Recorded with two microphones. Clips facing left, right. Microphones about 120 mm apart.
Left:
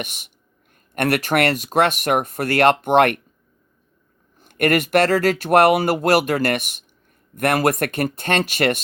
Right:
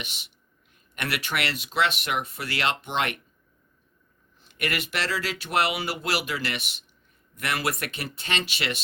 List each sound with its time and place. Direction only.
0.0 s speech: 50° left (ahead or behind)
4.4 s speech: 50° left (ahead or behind)